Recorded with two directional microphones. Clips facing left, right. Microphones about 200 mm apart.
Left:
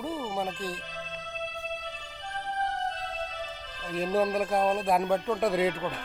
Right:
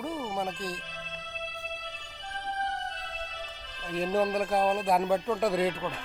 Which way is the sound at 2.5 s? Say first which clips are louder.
Left 5 dB; 35° left (ahead or behind).